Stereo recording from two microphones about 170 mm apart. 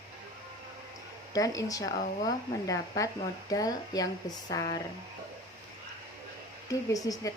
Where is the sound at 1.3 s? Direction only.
20° left (ahead or behind).